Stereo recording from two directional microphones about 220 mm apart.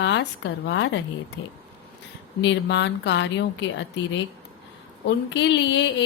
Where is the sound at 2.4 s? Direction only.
55° left (ahead or behind).